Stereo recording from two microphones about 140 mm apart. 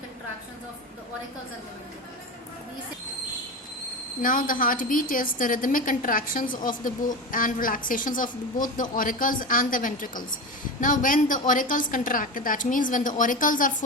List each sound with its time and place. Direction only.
4.2 s a woman's voice: 80° left